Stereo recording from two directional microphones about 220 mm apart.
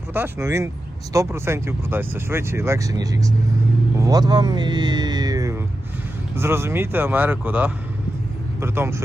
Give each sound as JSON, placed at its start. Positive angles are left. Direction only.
{"t": 0.1, "sound": "speech", "side_deg": -10}
{"t": 4.0, "sound": "music", "side_deg": -15}
{"t": 6.3, "sound": "speech", "side_deg": -10}